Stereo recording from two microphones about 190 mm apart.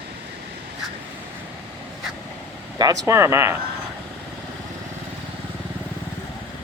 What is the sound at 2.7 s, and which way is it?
Speech, 20° right (ahead or behind).